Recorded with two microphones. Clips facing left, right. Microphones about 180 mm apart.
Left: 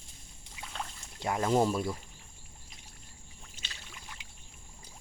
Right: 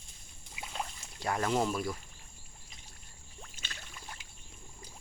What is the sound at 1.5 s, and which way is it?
Speech, 35° left (ahead or behind).